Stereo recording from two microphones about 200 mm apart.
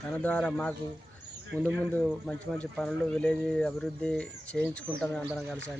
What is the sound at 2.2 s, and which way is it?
Speech, 5° left (ahead or behind).